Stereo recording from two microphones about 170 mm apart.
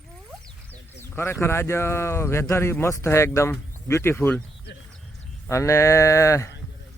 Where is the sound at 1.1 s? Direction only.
15° left (ahead or behind).